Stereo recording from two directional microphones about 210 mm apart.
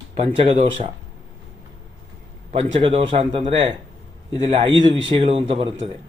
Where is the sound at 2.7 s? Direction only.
25° right (ahead or behind).